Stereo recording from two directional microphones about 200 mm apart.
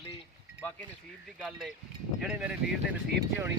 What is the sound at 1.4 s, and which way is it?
Speech, centre (ahead or behind).